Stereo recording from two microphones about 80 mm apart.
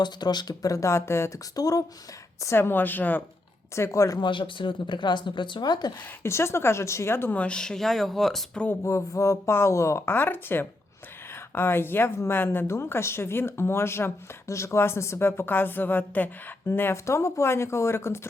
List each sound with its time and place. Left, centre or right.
0.0 s speech: left
1.5 s speech: left
2.4 s a woman's voice: left
3.8 s speech: left
4.2 s speech: left
6.2 s speech: left
7.3 s speech: centre
8.8 s speech: left
10.2 s a woman's voice: left